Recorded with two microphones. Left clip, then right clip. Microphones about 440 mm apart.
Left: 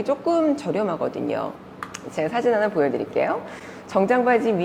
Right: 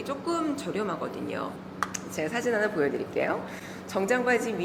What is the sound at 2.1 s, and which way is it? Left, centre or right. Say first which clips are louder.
A woman's voice: left 9 dB; left.